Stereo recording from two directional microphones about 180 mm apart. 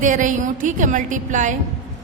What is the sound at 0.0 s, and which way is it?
A woman's voice, 45° right (ahead or behind).